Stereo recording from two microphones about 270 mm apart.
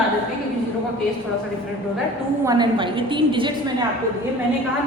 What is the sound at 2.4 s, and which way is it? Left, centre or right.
A woman's voice, centre.